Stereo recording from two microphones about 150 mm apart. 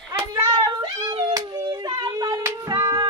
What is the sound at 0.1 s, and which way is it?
Hands, 20° right (ahead or behind).